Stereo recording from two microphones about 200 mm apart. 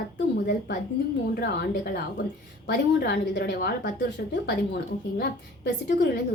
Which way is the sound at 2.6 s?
50° left (ahead or behind).